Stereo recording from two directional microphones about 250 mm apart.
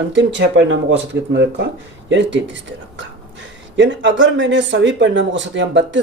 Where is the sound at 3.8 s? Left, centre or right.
Right.